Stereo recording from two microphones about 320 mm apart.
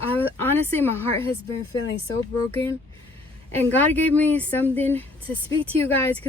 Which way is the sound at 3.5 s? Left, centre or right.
Centre.